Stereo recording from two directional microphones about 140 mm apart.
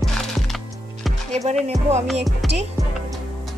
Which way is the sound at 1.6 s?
55° right (ahead or behind).